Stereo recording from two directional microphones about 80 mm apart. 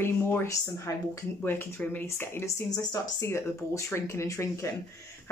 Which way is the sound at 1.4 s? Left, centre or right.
Left.